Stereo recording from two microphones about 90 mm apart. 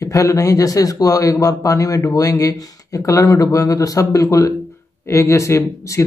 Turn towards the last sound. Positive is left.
turn(degrees=30)  # may be behind; listen again after turning